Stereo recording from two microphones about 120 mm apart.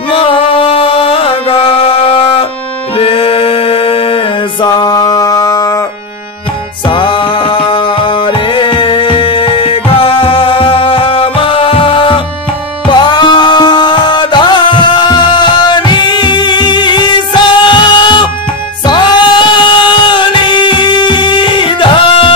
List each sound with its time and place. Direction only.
0.1 s music: 50° left (ahead or behind)
4.6 s mantra: 35° left (ahead or behind)
6.9 s music: 45° left (ahead or behind)